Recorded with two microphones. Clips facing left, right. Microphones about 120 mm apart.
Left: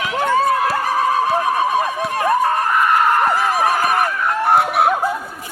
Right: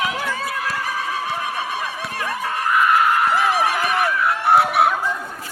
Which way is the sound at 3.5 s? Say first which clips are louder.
Left 3 dB; 40° left (ahead or behind).